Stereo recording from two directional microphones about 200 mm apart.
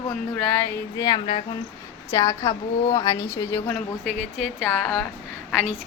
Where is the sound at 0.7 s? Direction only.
20° left (ahead or behind).